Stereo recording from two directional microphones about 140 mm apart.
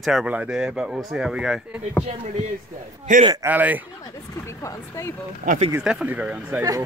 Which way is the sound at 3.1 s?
65° right (ahead or behind).